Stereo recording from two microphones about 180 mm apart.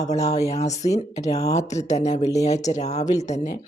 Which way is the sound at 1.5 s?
40° left (ahead or behind).